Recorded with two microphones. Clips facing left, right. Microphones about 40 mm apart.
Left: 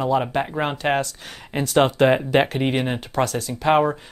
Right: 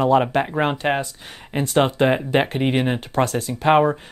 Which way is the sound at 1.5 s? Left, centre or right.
Centre.